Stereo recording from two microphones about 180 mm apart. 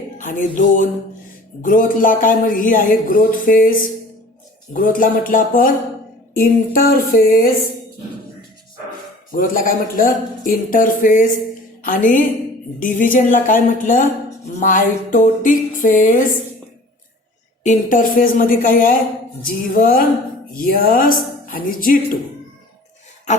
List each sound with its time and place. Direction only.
0.2 s speech: 45° left (ahead or behind)
9.3 s a woman's voice: 50° left (ahead or behind)
17.6 s speech: 45° left (ahead or behind)